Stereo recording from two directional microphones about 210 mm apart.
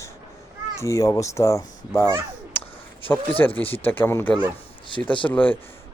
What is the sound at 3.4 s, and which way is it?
A child's voice, 10° left (ahead or behind).